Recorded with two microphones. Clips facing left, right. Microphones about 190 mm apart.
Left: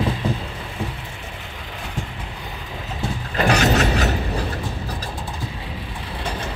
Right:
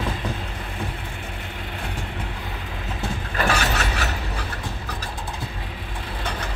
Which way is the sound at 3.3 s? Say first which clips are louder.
Left 6 dB; 35° left (ahead or behind).